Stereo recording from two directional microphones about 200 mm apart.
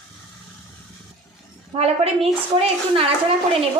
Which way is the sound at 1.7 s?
30° right (ahead or behind).